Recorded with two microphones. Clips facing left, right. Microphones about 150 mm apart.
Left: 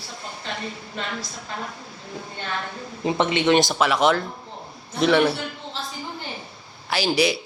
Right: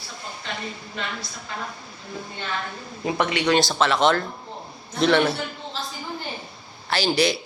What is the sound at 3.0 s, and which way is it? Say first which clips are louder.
Speech: left 2 dB; 20° left (ahead or behind).